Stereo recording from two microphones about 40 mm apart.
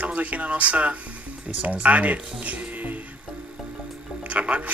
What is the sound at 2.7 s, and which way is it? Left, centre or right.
Music, right.